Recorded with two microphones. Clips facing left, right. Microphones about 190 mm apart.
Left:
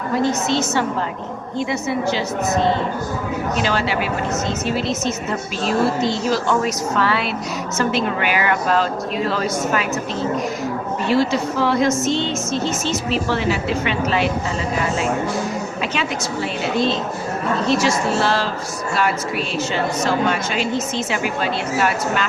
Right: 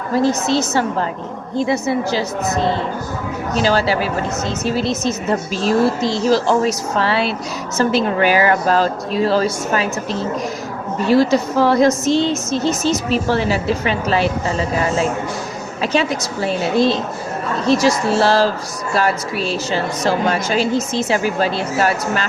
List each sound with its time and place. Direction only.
0.2 s a woman's voice: 35° right (ahead or behind)
3.5 s a woman's voice: 35° right (ahead or behind)
11.1 s a woman's voice: 40° right (ahead or behind)
15.8 s a woman's voice: 40° right (ahead or behind)
17.7 s a woman's voice: 40° right (ahead or behind)